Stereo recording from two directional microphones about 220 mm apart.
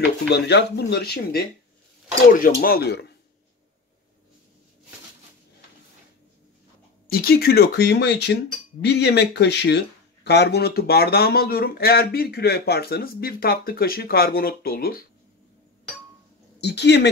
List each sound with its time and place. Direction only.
0.3 s speech: 50° left (ahead or behind)
7.1 s speech: 45° left (ahead or behind)
16.6 s speech: 50° left (ahead or behind)